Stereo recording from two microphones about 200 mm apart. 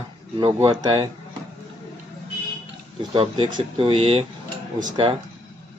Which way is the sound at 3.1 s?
25° right (ahead or behind).